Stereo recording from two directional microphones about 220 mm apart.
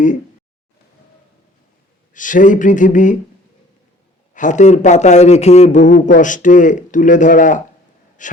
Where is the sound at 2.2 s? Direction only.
35° left (ahead or behind).